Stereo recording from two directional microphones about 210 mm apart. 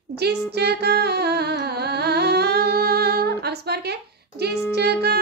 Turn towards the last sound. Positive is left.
turn(degrees=-50)  # may be behind; listen again after turning